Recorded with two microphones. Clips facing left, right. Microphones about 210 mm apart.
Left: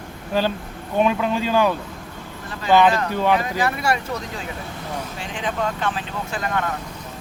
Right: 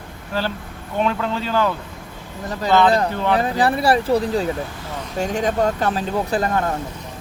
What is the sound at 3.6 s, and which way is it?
Speech, 35° right (ahead or behind).